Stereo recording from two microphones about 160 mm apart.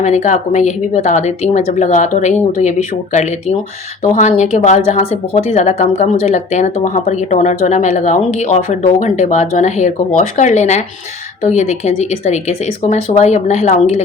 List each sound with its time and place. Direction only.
0.0 s speech: 45° left (ahead or behind)